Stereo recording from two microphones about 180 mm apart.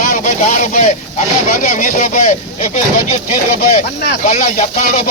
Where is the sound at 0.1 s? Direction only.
45° left (ahead or behind).